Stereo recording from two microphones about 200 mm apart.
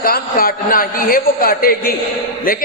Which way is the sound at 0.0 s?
45° left (ahead or behind).